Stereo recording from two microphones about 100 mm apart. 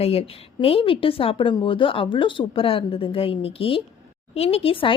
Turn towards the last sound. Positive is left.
turn(degrees=75)  # may be behind; listen again after turning